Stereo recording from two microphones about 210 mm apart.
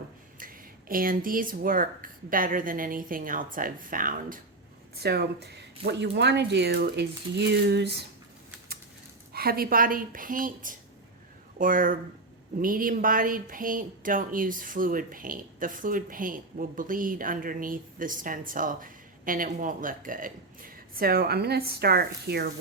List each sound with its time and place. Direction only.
0.3 s speech: 40° right (ahead or behind)
9.3 s speech: 45° right (ahead or behind)